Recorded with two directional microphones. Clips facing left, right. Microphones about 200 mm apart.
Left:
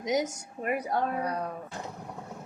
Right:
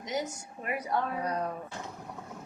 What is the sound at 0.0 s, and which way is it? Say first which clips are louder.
Speech: left 6 dB; 45° left (ahead or behind).